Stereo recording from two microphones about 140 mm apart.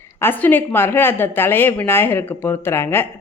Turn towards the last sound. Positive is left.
turn(degrees=15)  # may be behind; listen again after turning